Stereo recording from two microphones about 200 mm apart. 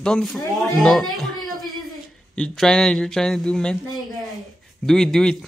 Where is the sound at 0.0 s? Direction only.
Centre (ahead or behind).